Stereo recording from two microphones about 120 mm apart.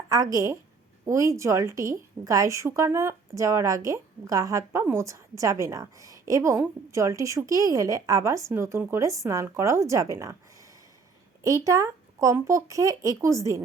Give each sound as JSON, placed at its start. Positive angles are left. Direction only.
{"t": 0.1, "sound": "a woman's voice", "side_deg": -25}
{"t": 11.4, "sound": "a woman's voice", "side_deg": -25}